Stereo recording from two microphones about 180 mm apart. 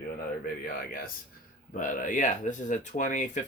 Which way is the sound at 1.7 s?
45° left (ahead or behind).